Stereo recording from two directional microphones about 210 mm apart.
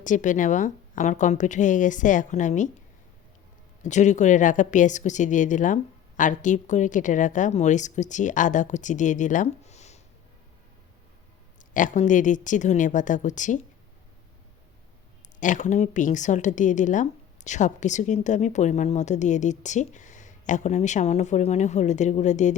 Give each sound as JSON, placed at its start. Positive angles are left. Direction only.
{"t": 0.0, "sound": "a woman's voice", "side_deg": 35}
{"t": 3.8, "sound": "a woman's voice", "side_deg": 35}
{"t": 11.7, "sound": "a woman's voice", "side_deg": 40}
{"t": 15.4, "sound": "a woman's voice", "side_deg": 35}